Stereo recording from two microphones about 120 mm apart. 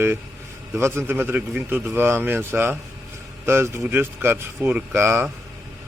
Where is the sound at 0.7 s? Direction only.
20° right (ahead or behind).